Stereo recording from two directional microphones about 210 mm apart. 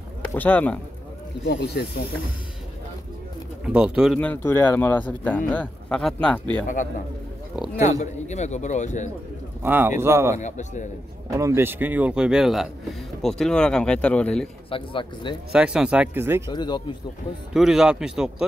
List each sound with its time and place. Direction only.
0.3 s speech: 10° left (ahead or behind)
1.4 s speech: 50° left (ahead or behind)
3.6 s speech: 5° right (ahead or behind)
7.7 s a man's voice: 35° left (ahead or behind)
9.6 s speech: 10° right (ahead or behind)
10.4 s a man's voice: 35° left (ahead or behind)
11.3 s speech: 15° right (ahead or behind); by 14.5 s 5° left (ahead or behind)
14.7 s speech: 25° left (ahead or behind)
15.5 s speech: 5° right (ahead or behind)
16.4 s speech: 20° left (ahead or behind)
17.6 s speech: centre (ahead or behind)